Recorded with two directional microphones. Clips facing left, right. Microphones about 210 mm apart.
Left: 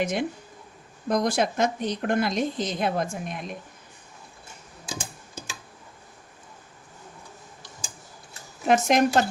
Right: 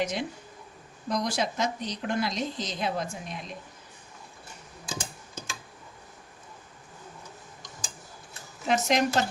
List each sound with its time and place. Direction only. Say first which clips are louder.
0.0 s speech: left 4 dB; 55° left (ahead or behind)
4.9 s music: left 1 dB; 10° left (ahead or behind)
8.6 s speech: left 5 dB; 50° left (ahead or behind)